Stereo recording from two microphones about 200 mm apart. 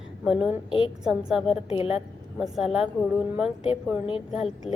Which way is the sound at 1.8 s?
30° left (ahead or behind).